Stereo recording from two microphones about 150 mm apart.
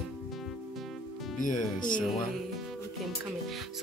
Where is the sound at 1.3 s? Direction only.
60° left (ahead or behind).